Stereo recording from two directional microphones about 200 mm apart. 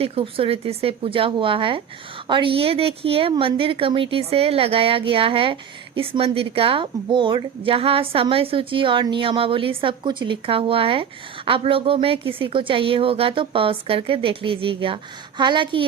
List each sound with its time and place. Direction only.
0.0 s a woman's voice: 30° right (ahead or behind)